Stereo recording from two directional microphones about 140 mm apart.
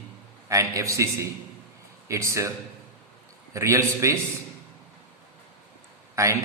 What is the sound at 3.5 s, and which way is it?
Speech, 20° right (ahead or behind).